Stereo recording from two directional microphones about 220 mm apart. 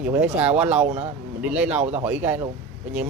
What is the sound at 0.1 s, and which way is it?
Speech, 5° right (ahead or behind).